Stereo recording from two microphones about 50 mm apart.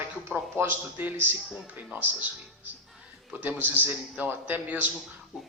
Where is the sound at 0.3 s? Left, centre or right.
Right.